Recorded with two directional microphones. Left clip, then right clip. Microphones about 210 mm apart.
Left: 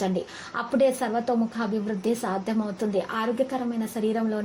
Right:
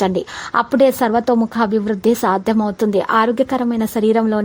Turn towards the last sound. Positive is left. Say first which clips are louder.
# right 11 dB
turn(degrees=-45)  # may be behind; listen again after turning